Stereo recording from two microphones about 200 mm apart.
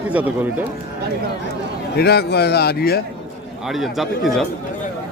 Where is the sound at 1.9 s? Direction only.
55° left (ahead or behind).